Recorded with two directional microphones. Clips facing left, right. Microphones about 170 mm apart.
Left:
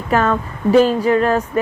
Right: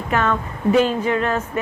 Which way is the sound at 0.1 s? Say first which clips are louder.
Left 4 dB; 40° left (ahead or behind).